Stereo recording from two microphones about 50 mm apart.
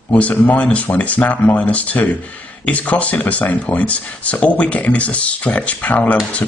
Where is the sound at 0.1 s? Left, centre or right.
Left.